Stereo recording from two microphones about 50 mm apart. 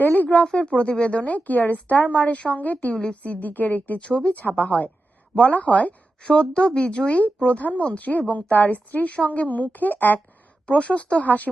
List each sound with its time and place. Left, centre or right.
0.0 s a woman's voice: left
10.7 s speech: left